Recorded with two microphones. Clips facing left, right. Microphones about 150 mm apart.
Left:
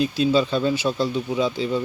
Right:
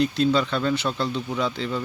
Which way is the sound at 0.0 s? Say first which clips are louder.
Left 1 dB; 15° left (ahead or behind).